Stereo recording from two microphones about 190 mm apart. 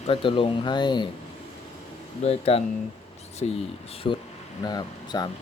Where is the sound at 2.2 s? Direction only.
30° left (ahead or behind).